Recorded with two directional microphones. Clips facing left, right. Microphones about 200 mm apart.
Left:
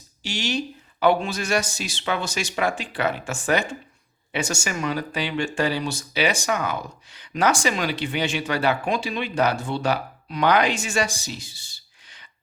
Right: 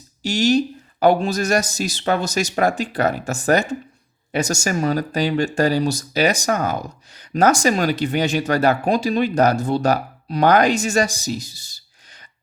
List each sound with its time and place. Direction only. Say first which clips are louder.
0.2 s speech: right 10 dB; 40° right (ahead or behind)